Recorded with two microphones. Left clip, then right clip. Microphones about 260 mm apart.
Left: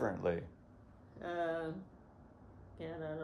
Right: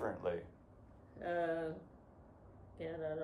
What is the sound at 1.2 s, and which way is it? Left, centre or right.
Speech, centre.